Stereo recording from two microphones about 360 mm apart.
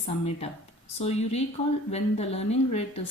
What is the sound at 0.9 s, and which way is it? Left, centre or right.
A woman's voice, centre.